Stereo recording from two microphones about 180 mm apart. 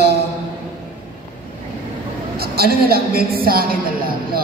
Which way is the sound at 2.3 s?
60° right (ahead or behind).